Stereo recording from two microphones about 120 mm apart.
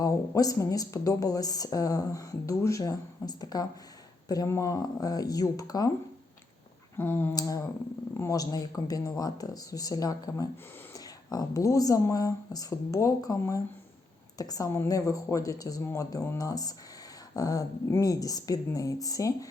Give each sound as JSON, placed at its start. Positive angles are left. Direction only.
{"t": 0.0, "sound": "speech", "side_deg": 30}
{"t": 6.9, "sound": "a sound", "side_deg": 20}
{"t": 7.3, "sound": "speech", "side_deg": 30}